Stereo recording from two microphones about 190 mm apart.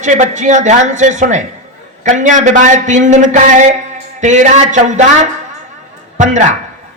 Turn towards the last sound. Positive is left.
turn(degrees=-40)  # may be behind; listen again after turning